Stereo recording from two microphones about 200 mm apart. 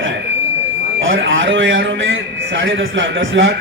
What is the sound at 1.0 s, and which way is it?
Speech, 75° right (ahead or behind).